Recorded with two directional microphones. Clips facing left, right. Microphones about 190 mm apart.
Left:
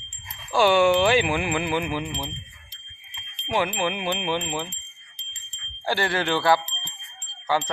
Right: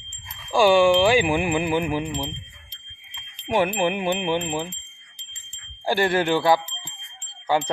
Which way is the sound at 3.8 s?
20° right (ahead or behind).